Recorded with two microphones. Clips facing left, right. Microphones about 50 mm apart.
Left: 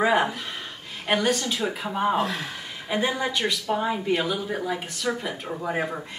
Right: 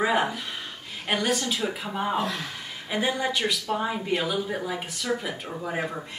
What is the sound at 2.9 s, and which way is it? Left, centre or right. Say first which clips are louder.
Speech: left 1 dB; centre.